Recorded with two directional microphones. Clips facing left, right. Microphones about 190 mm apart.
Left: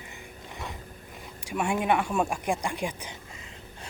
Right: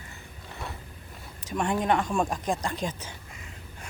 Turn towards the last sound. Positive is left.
turn(degrees=15)  # may be behind; listen again after turning